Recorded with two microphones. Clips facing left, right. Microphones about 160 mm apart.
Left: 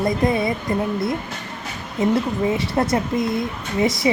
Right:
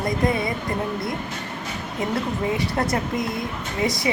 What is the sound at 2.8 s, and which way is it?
Speech, 25° left (ahead or behind).